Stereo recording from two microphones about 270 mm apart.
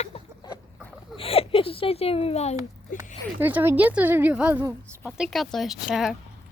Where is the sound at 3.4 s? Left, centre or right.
Centre.